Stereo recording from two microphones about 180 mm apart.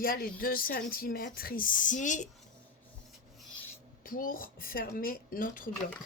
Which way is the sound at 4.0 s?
50° left (ahead or behind).